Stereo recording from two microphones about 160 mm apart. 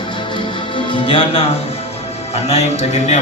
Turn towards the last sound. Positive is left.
turn(degrees=45)  # may be behind; listen again after turning